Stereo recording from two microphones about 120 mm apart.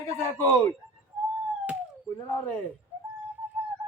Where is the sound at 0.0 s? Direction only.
25° left (ahead or behind).